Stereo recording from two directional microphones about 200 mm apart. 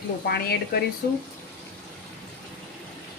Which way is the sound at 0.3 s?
50° left (ahead or behind).